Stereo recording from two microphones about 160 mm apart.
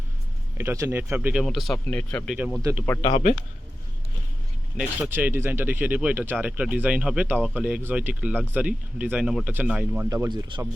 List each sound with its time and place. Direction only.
0.5 s speech: 15° right (ahead or behind); by 2.3 s 10° left (ahead or behind)
2.3 s speech: 5° right (ahead or behind)
2.8 s speech: 15° left (ahead or behind)
3.1 s speech: 45° left (ahead or behind)
4.8 s speech: 10° right (ahead or behind)
10.1 s speech: 25° right (ahead or behind)